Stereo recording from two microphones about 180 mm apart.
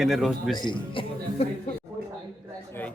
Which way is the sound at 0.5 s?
25° left (ahead or behind).